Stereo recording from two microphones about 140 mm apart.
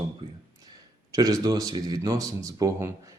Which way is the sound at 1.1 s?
25° right (ahead or behind).